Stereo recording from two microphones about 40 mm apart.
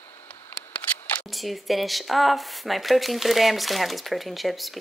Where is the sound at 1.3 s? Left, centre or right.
Centre.